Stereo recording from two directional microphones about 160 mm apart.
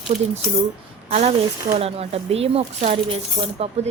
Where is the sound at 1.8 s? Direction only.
40° right (ahead or behind).